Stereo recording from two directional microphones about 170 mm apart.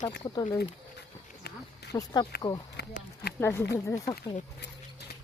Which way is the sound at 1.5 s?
70° left (ahead or behind).